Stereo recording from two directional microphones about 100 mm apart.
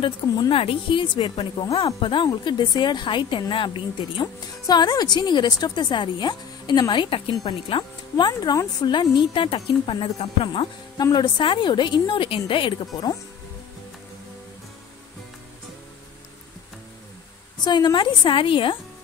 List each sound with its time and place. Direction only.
0.0 s a woman's voice: 60° left (ahead or behind)
8.3 s a woman's voice: 45° left (ahead or behind); by 10.7 s 65° left (ahead or behind)
11.0 s a woman's voice: 45° left (ahead or behind)
17.6 s a woman's voice: 45° left (ahead or behind)